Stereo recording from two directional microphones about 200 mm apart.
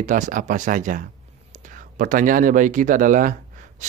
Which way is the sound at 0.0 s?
40° right (ahead or behind).